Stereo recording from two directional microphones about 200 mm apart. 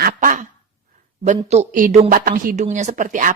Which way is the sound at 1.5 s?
40° right (ahead or behind).